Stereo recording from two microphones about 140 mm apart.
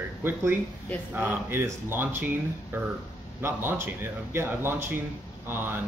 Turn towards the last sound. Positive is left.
turn(degrees=-15)  # may be behind; listen again after turning